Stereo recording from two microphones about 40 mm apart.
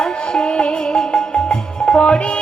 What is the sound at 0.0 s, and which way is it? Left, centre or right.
Music, left.